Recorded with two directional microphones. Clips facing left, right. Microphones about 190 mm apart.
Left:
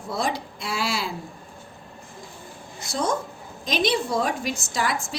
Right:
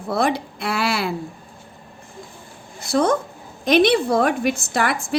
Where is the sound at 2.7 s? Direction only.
60° right (ahead or behind).